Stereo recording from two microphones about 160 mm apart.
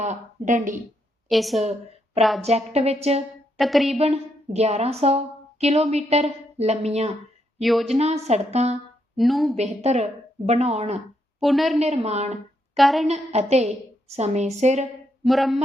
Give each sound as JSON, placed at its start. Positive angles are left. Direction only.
{"t": 0.0, "sound": "a woman's voice", "side_deg": -50}
{"t": 1.3, "sound": "a woman's voice", "side_deg": 0}
{"t": 2.4, "sound": "a woman's voice", "side_deg": -40}
{"t": 3.6, "sound": "a woman's voice", "side_deg": 0}
{"t": 3.9, "sound": "a woman's voice", "side_deg": -40}
{"t": 7.6, "sound": "a woman's voice", "side_deg": 0}
{"t": 7.9, "sound": "a woman's voice", "side_deg": -40}
{"t": 9.1, "sound": "a woman's voice", "side_deg": 0}
{"t": 9.6, "sound": "a woman's voice", "side_deg": -45}
{"t": 11.3, "sound": "a woman's voice", "side_deg": 0}
{"t": 11.8, "sound": "a woman's voice", "side_deg": -45}
{"t": 12.7, "sound": "a woman's voice", "side_deg": 0}
{"t": 13.1, "sound": "a woman's voice", "side_deg": -40}
{"t": 15.3, "sound": "a woman's voice", "side_deg": 0}